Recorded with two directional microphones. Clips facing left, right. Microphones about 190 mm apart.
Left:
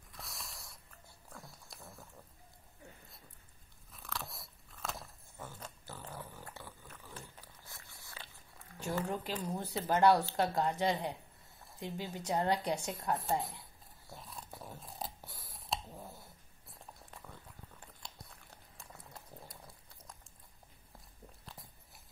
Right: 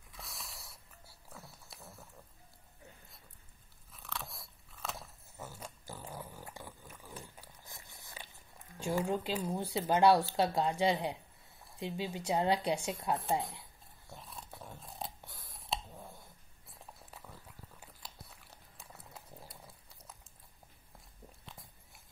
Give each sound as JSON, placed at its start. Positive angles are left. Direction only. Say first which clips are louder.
{"t": 0.1, "sound": "a sound", "louder": "even", "side_deg": 0}
{"t": 3.9, "sound": "biting", "louder": "even", "side_deg": 0}
{"t": 8.7, "sound": "speech", "louder": "right 3 dB", "side_deg": -10}
{"t": 14.0, "sound": "tearing", "louder": "even", "side_deg": 0}
{"t": 16.7, "sound": "biting", "louder": "even", "side_deg": 0}